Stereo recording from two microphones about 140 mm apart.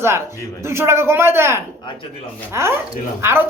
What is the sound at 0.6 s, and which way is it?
Speech, 20° right (ahead or behind).